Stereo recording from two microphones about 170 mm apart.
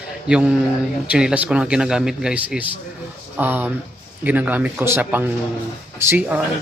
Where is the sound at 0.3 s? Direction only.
5° right (ahead or behind).